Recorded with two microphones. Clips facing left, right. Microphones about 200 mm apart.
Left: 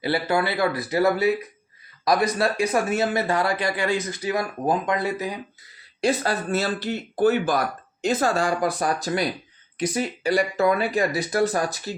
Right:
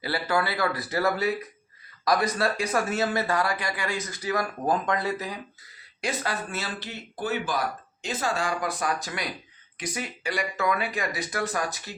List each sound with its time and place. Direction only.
0.0 s speech: 25° left (ahead or behind)
6.0 s speech: 35° left (ahead or behind)